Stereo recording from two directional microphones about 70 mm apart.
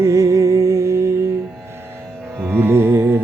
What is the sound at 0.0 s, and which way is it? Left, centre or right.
Music, right.